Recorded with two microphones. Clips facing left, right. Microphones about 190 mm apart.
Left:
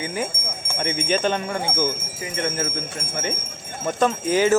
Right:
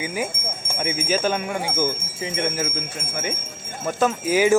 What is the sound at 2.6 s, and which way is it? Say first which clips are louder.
Speech: even; 5° right (ahead or behind).